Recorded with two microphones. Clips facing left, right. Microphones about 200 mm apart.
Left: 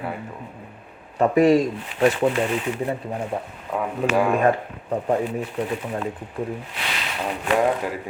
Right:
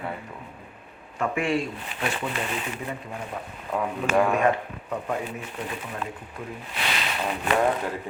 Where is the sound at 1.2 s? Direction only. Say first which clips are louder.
Left 9 dB; 40° left (ahead or behind).